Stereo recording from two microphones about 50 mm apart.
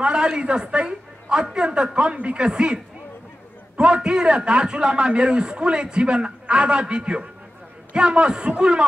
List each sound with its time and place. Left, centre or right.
0.0 s a man's voice: centre